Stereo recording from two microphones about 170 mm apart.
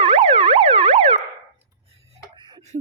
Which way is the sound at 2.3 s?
25° right (ahead or behind).